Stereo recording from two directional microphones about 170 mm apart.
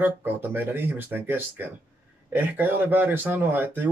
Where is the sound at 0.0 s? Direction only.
10° right (ahead or behind).